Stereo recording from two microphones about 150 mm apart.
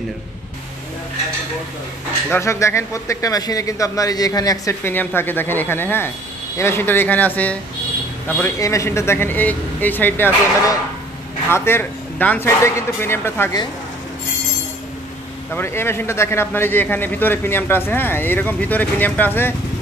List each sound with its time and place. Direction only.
2.3 s a man's voice: 20° left (ahead or behind)
8.5 s a man's voice: 20° left (ahead or behind)
15.5 s a man's voice: 15° left (ahead or behind)